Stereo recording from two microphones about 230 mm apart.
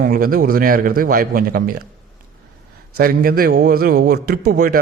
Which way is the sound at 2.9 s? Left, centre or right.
Right.